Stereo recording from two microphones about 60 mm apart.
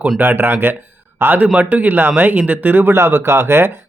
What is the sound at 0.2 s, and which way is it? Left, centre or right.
Speech, right.